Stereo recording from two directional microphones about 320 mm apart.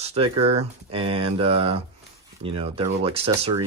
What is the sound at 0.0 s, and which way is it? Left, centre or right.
Speech, centre.